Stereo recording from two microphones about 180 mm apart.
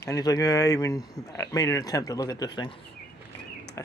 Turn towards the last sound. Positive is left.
turn(degrees=15)  # may be behind; listen again after turning